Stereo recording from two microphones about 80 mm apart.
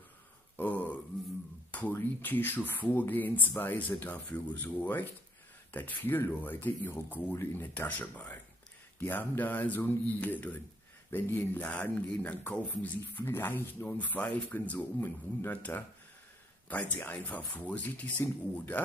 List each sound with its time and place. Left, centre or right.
0.6 s a sound: left
1.7 s speech: centre
13.0 s speech: left